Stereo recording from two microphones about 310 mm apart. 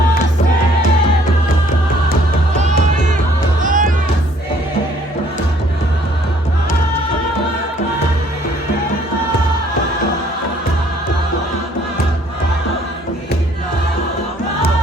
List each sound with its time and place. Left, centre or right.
3.6 s music: right